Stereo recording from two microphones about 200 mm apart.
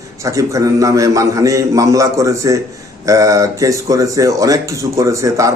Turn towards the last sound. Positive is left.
turn(degrees=-15)  # may be behind; listen again after turning